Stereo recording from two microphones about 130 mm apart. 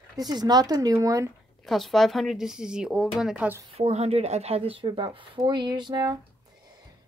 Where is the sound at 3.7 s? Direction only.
55° right (ahead or behind); by 6.1 s 35° right (ahead or behind).